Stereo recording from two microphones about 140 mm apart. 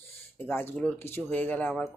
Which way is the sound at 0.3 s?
15° left (ahead or behind).